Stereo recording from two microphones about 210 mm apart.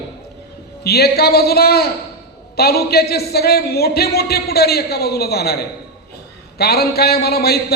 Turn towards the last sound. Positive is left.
turn(degrees=50)  # may be behind; listen again after turning